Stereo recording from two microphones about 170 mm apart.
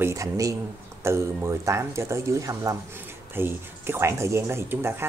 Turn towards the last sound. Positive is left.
turn(degrees=-15)  # may be behind; listen again after turning